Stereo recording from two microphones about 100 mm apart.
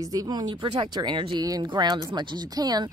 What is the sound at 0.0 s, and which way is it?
A woman's voice, 35° right (ahead or behind).